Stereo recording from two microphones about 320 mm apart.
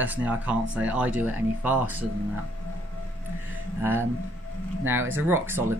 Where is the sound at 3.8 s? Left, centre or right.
Centre.